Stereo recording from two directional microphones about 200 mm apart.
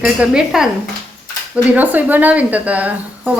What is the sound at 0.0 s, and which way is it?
Speech, 5° right (ahead or behind).